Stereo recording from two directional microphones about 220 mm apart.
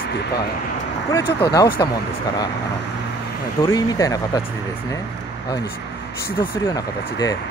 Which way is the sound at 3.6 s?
15° left (ahead or behind).